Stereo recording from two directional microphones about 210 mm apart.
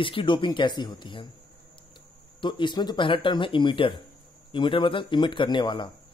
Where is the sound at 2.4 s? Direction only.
20° left (ahead or behind).